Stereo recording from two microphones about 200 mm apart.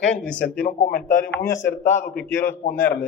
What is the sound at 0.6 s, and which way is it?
Speech, 40° left (ahead or behind).